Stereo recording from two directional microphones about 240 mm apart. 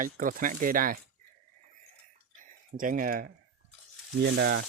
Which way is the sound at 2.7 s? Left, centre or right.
Right.